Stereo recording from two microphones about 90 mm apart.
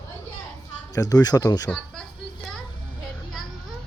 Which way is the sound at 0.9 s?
40° left (ahead or behind).